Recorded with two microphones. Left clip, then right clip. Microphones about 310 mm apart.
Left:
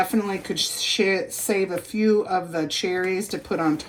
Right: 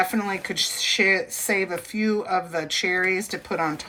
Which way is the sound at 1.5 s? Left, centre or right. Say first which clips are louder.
Left 1 dB; right.